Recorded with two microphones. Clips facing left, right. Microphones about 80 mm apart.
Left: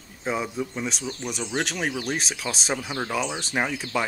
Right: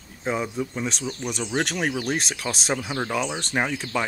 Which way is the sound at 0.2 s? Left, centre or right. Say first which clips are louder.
Right 1 dB; centre.